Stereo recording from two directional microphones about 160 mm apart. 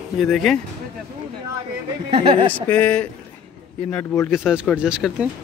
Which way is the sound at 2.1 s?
35° right (ahead or behind).